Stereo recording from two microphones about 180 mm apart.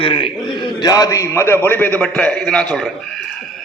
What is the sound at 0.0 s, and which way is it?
A man's voice, 30° left (ahead or behind).